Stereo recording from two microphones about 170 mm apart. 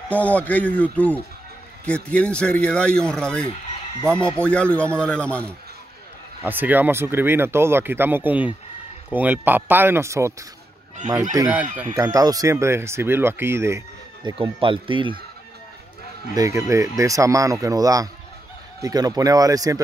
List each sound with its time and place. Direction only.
0.1 s a man's voice: 10° left (ahead or behind)
6.4 s speech: 10° right (ahead or behind)
11.7 s speech: 10° right (ahead or behind)
14.2 s speech: 30° right (ahead or behind)
16.3 s speech: 20° right (ahead or behind)